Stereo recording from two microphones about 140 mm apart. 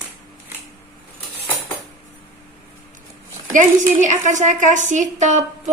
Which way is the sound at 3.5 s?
60° right (ahead or behind).